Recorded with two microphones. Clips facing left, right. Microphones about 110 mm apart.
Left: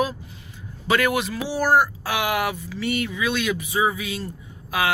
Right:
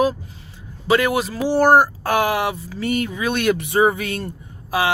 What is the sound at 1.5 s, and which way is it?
Speech, 55° right (ahead or behind).